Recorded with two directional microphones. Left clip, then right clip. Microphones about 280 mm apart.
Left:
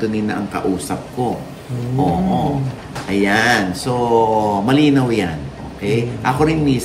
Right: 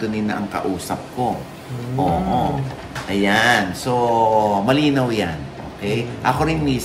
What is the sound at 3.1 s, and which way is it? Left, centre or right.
A man's voice, centre.